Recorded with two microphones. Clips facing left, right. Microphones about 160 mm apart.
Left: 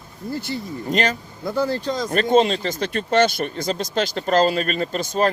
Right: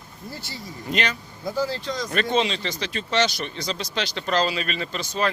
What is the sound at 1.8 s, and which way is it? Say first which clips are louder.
Speech: left 5 dB; 40° left (ahead or behind).